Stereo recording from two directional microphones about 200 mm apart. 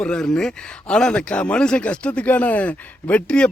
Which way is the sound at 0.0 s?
5° left (ahead or behind).